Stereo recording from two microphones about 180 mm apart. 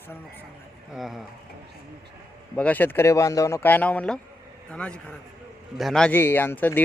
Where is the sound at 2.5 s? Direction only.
10° left (ahead or behind).